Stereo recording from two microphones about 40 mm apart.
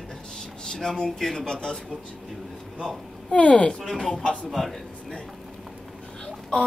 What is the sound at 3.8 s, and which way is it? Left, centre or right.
Speech, centre.